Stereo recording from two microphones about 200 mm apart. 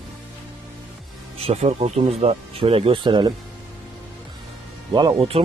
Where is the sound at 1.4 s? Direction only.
30° right (ahead or behind).